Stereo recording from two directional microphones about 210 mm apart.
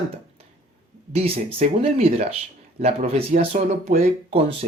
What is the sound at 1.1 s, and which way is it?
Speech, 30° right (ahead or behind).